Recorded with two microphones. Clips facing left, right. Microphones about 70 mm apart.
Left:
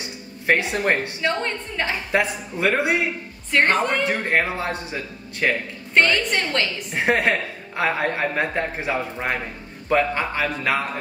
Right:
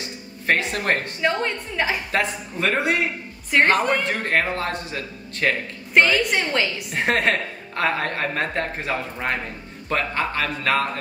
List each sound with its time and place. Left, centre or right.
0.5 s a woman's voice: centre
1.2 s a woman's voice: centre
2.0 s a woman's voice: centre
3.4 s speech: centre
4.0 s a woman's voice: centre
5.9 s a woman's voice: centre
6.9 s a woman's voice: centre